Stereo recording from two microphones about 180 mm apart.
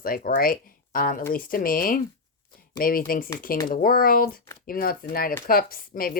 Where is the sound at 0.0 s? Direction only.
55° left (ahead or behind).